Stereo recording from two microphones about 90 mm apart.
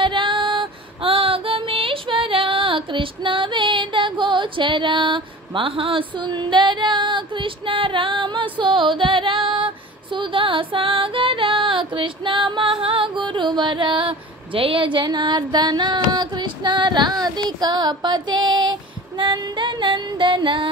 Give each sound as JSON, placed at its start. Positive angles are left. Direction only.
{"t": 0.0, "sound": "female singing", "side_deg": -70}
{"t": 10.1, "sound": "music", "side_deg": -70}